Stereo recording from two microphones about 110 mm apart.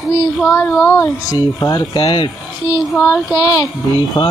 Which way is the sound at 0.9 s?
30° left (ahead or behind).